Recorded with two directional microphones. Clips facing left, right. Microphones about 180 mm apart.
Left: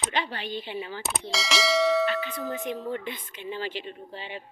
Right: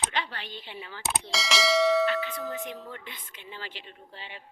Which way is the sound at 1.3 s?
Centre (ahead or behind).